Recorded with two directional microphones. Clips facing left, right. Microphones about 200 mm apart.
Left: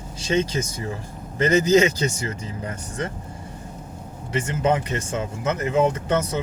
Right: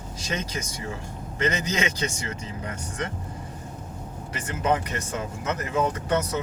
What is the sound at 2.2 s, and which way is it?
Speech, 30° left (ahead or behind).